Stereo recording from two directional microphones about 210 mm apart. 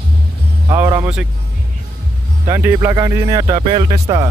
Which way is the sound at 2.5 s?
15° right (ahead or behind).